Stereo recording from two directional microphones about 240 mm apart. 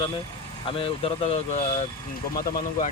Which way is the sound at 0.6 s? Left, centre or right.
Left.